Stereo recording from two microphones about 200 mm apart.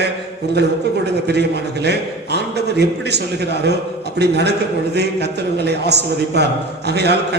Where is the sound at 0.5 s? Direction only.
55° right (ahead or behind).